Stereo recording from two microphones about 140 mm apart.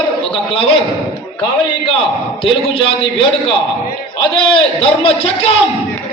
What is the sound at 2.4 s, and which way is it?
A man's voice, 40° left (ahead or behind).